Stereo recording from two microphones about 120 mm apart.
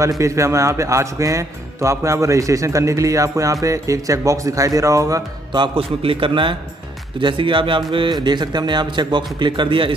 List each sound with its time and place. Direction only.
0.2 s speech: 25° right (ahead or behind)
5.5 s a man's voice: 45° right (ahead or behind)